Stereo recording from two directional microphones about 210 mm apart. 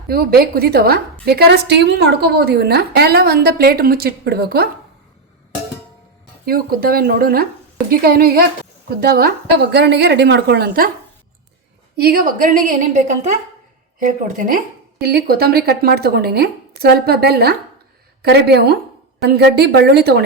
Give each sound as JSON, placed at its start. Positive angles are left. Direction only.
{"t": 0.1, "sound": "a woman's voice", "side_deg": -45}
{"t": 6.4, "sound": "a woman's voice", "side_deg": -45}
{"t": 11.9, "sound": "a woman's voice", "side_deg": -45}